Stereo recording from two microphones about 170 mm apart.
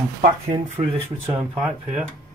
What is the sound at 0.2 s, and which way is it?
Speech, 40° right (ahead or behind).